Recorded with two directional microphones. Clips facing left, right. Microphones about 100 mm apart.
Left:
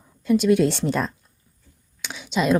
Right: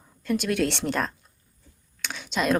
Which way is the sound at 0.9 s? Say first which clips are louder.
Left 3 dB; centre (ahead or behind).